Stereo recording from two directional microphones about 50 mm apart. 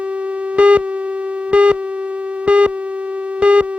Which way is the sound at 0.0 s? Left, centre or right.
Right.